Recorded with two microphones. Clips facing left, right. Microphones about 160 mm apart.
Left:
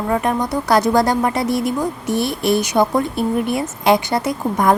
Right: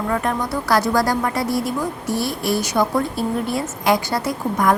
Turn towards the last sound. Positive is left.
turn(degrees=25)  # may be behind; listen again after turning